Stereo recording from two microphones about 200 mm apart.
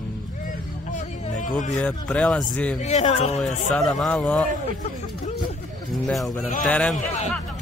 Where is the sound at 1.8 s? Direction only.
5° left (ahead or behind).